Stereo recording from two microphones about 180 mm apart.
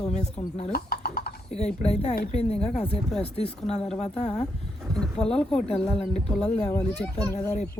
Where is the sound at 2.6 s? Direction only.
5° left (ahead or behind).